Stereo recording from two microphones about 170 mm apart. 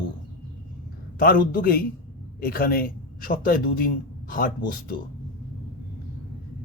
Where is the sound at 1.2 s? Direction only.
55° left (ahead or behind).